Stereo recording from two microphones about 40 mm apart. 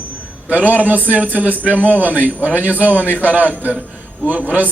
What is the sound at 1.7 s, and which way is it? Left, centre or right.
Speech, left.